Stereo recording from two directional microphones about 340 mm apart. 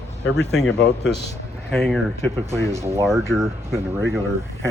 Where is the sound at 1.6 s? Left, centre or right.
Centre.